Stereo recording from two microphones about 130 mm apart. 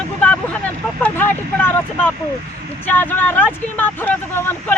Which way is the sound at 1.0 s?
15° left (ahead or behind).